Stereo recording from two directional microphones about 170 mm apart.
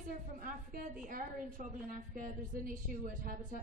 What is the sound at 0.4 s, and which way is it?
A woman's voice, 55° right (ahead or behind).